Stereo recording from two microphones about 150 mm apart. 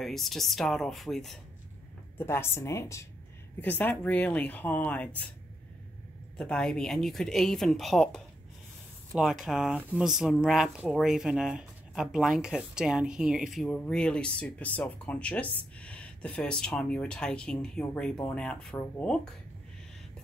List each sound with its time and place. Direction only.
0.0 s speech: centre (ahead or behind)
2.1 s a woman's voice: 15° left (ahead or behind)
6.3 s speech: 5° left (ahead or behind)